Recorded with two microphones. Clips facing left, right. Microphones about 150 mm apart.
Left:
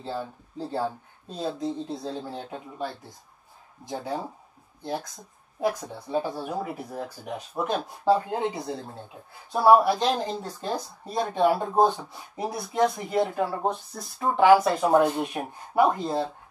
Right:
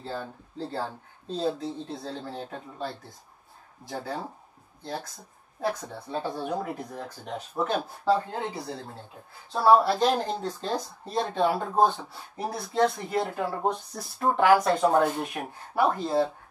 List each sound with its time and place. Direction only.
0.0 s speech: 15° left (ahead or behind)
3.8 s speech: 20° left (ahead or behind)
5.6 s speech: 15° left (ahead or behind)
9.9 s speech: 10° right (ahead or behind)
10.4 s speech: 10° left (ahead or behind)
13.4 s speech: centre (ahead or behind); by 16.2 s 15° left (ahead or behind)